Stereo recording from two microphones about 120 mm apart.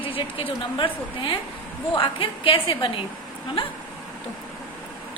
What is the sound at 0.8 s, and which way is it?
A woman's voice, 45° left (ahead or behind).